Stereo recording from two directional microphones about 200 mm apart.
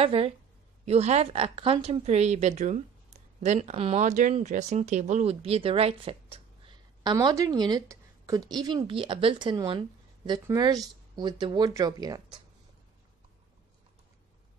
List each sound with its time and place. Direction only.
0.0 s speech: 30° right (ahead or behind)